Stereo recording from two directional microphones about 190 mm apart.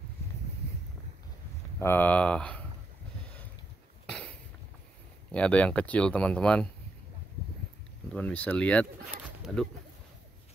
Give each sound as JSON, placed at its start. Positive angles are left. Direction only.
{"t": 1.8, "sound": "speech", "side_deg": 10}
{"t": 5.3, "sound": "speech", "side_deg": 5}
{"t": 8.1, "sound": "speech", "side_deg": 5}
{"t": 9.2, "sound": "pigeon", "side_deg": -5}